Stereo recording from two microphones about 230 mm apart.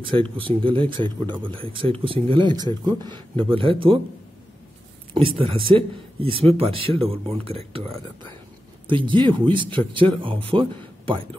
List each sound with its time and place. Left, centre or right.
0.1 s speech: right
5.1 s speech: right